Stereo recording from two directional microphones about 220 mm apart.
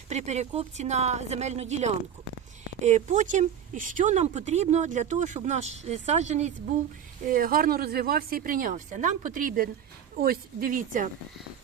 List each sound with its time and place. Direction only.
0.1 s speech: 30° right (ahead or behind)